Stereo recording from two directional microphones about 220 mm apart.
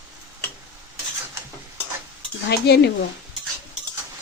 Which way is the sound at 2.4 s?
50° left (ahead or behind).